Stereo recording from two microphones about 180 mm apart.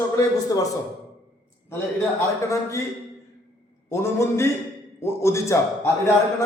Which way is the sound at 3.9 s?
15° left (ahead or behind).